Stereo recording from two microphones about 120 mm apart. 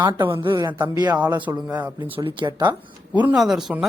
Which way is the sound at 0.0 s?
40° right (ahead or behind).